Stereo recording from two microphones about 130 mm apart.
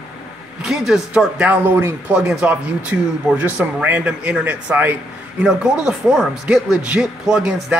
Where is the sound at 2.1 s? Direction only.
5° right (ahead or behind).